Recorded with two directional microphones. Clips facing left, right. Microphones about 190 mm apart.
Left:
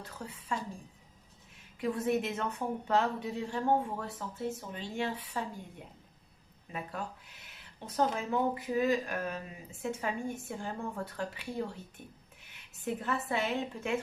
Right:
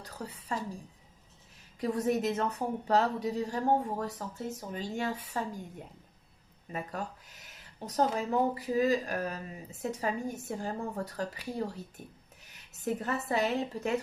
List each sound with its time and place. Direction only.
0.5 s speech: 40° right (ahead or behind)
1.8 s speech: 40° right (ahead or behind)
6.7 s speech: 40° right (ahead or behind)